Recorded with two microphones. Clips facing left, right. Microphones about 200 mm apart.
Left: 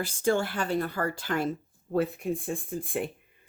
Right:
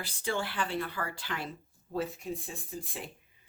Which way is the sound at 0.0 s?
45° left (ahead or behind).